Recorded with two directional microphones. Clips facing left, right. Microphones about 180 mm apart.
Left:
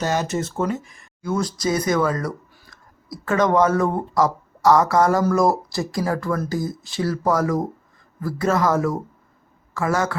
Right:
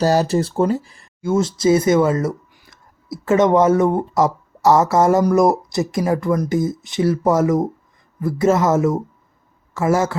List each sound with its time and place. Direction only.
0.0 s speech: 35° right (ahead or behind)